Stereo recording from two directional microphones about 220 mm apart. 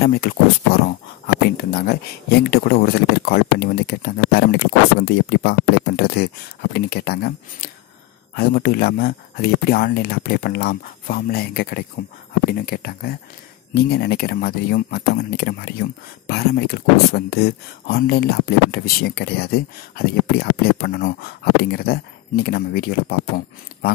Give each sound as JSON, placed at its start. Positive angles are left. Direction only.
{"t": 0.0, "sound": "speech", "side_deg": 45}